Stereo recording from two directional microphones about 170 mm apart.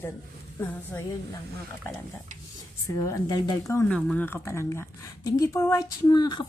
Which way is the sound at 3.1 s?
20° left (ahead or behind).